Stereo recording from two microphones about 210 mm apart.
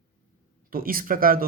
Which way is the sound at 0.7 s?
45° right (ahead or behind).